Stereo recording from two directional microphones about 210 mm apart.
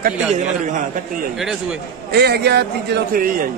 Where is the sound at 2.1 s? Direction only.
50° right (ahead or behind).